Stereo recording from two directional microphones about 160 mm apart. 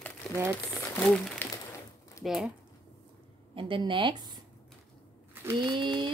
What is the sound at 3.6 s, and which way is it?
Speech, 35° right (ahead or behind).